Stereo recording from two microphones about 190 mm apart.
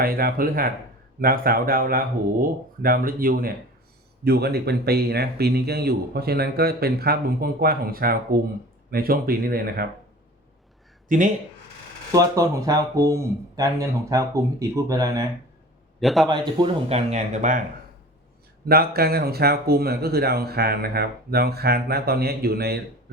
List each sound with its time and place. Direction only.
0.0 s speech: 50° right (ahead or behind)
11.1 s speech: 45° right (ahead or behind)
12.1 s speech: 15° right (ahead or behind)
16.0 s a man's voice: centre (ahead or behind)
16.6 s speech: 35° right (ahead or behind)
18.7 s speech: 55° right (ahead or behind)